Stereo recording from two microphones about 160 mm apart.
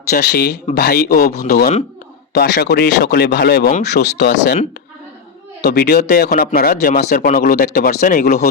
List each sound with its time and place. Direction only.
0.1 s speech: 80° left
5.6 s speech: 75° left (ahead or behind)